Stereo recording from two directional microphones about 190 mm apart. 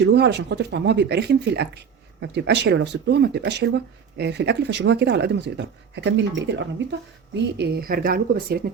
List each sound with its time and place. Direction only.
0.0 s speech: 65° right (ahead or behind)
7.6 s speech: 50° right (ahead or behind)